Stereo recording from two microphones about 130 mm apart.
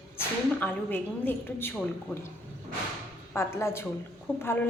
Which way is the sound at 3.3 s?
20° left (ahead or behind).